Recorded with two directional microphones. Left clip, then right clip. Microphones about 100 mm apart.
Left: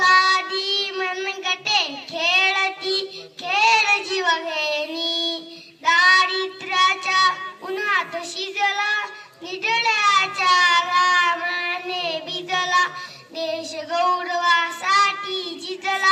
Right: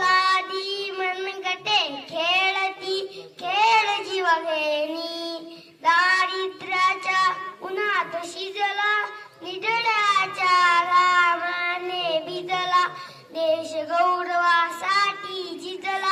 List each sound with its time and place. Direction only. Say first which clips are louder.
0.0 s child singing: left 4 dB; 40° right (ahead or behind)